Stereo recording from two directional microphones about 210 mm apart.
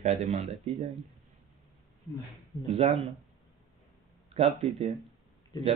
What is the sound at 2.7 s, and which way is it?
Speech, 30° right (ahead or behind).